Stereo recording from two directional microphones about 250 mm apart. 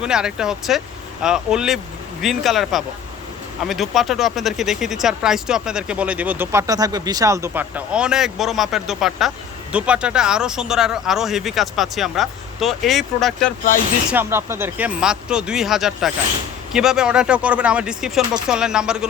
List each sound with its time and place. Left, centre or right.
0.0 s speech: centre